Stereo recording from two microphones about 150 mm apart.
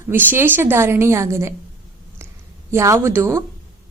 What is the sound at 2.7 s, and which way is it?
Speech, 20° right (ahead or behind).